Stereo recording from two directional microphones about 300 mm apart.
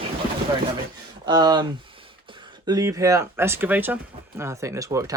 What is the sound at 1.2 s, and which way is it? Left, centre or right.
Speech, centre.